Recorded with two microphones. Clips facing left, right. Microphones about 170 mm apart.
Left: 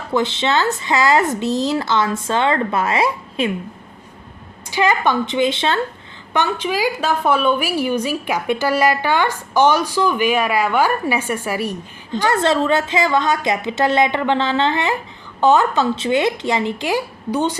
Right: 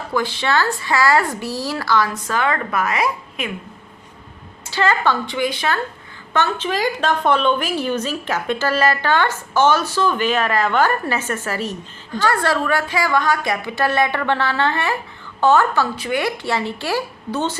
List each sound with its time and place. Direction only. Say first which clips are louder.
0.1 s speech: left 2 dB; 20° left (ahead or behind)
4.7 s speech: left 1 dB; 15° left (ahead or behind)
6.3 s a woman's voice: left 1 dB; 15° left (ahead or behind)